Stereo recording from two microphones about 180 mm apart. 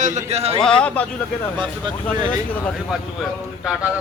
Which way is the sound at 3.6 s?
5° right (ahead or behind).